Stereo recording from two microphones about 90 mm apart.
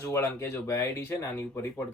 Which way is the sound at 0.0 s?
30° left (ahead or behind).